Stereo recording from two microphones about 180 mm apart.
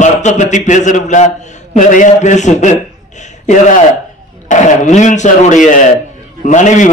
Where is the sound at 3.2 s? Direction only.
40° left (ahead or behind).